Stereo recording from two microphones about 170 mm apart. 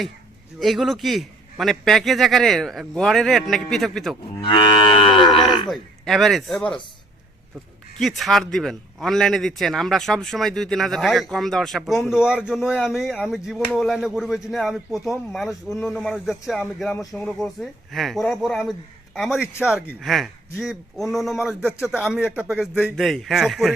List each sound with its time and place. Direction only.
0.6 s a man's voice: centre (ahead or behind)
4.4 s livestock: 30° left (ahead or behind)
5.6 s speech: centre (ahead or behind)
7.9 s a man's voice: centre (ahead or behind)